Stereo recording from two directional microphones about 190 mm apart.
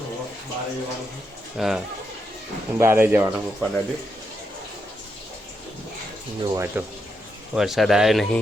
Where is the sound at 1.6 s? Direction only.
Centre (ahead or behind).